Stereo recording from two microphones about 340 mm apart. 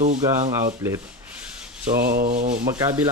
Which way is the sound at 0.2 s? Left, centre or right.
Centre.